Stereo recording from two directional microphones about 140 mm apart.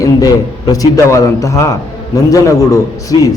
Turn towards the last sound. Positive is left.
turn(degrees=25)  # may be behind; listen again after turning